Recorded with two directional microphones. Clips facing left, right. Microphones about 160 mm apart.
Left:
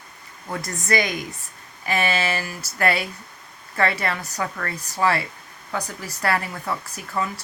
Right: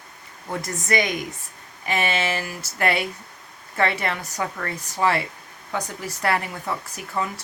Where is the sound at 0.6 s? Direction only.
20° right (ahead or behind).